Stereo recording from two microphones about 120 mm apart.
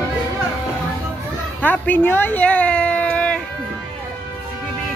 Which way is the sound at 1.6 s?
15° left (ahead or behind).